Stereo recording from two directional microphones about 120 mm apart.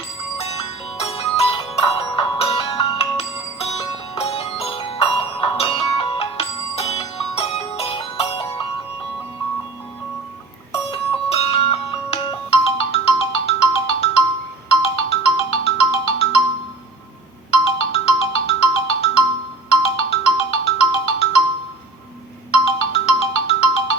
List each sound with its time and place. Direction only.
0.3 s music: 55° left (ahead or behind)
10.7 s music: 50° left (ahead or behind)
14.7 s ringtone: 55° left (ahead or behind)
17.7 s ringtone: 55° left (ahead or behind)
22.5 s ringtone: 50° left (ahead or behind)